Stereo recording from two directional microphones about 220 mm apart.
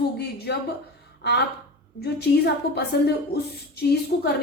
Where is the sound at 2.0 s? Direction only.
50° left (ahead or behind).